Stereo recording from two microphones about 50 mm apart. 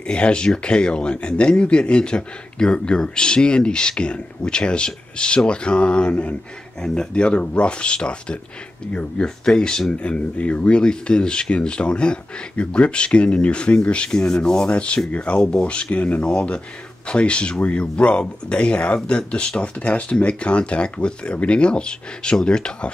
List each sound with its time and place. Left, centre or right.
0.0 s speech: centre